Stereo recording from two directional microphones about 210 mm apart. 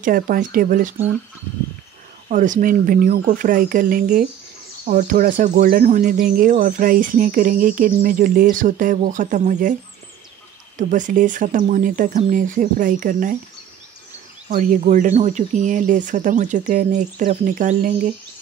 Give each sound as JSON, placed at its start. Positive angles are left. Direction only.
{"t": 0.0, "sound": "speech", "side_deg": -40}
{"t": 2.2, "sound": "speech", "side_deg": -35}
{"t": 10.8, "sound": "speech", "side_deg": -40}
{"t": 14.5, "sound": "speech", "side_deg": -40}